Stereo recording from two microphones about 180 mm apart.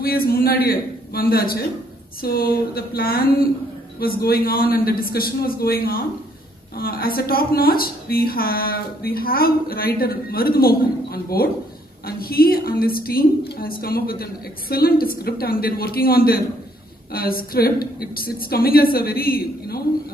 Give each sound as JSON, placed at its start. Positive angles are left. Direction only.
{"t": 0.0, "sound": "a woman's voice", "side_deg": 55}